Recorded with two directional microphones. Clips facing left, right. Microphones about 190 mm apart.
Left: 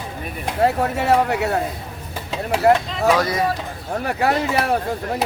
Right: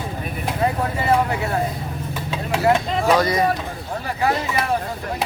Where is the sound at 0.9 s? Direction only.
70° left (ahead or behind).